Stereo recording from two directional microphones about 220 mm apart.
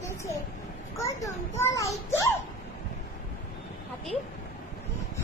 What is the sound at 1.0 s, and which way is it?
Children playing, 15° left (ahead or behind).